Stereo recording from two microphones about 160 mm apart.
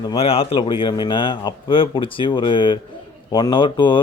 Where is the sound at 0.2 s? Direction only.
35° left (ahead or behind).